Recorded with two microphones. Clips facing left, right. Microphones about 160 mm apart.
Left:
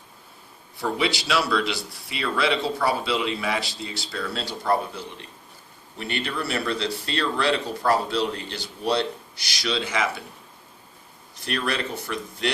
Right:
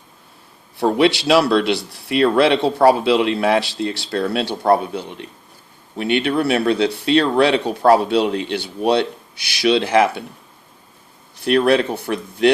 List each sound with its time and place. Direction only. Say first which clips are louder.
0.8 s speech: right 10 dB; 65° right (ahead or behind)
11.3 s speech: right 13 dB; 60° right (ahead or behind)